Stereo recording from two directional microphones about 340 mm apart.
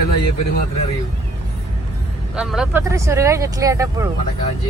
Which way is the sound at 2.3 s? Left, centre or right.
Centre.